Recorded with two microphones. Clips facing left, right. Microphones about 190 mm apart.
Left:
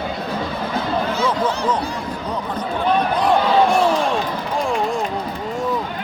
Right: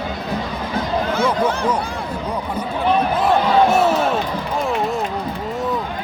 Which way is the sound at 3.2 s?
5° right (ahead or behind).